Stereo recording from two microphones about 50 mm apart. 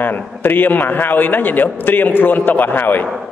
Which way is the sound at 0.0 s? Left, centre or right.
Left.